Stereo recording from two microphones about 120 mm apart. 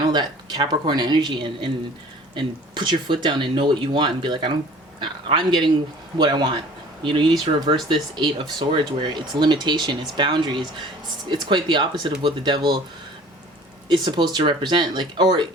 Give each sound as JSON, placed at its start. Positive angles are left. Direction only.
{"t": 0.1, "sound": "speech", "side_deg": -35}
{"t": 13.8, "sound": "speech", "side_deg": -40}